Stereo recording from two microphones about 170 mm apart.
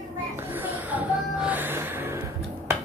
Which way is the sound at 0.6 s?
10° right (ahead or behind).